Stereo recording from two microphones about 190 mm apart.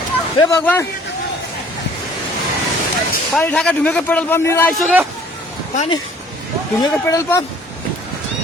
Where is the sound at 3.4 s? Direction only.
5° left (ahead or behind).